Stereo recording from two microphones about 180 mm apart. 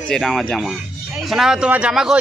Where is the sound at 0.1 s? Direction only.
Centre (ahead or behind).